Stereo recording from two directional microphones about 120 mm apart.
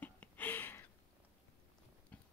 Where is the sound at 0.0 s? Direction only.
15° left (ahead or behind).